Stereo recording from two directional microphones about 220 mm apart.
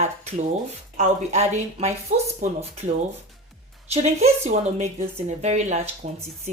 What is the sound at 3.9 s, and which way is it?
Speech, 30° right (ahead or behind).